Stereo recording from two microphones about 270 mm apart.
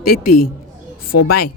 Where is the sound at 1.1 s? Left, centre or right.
Left.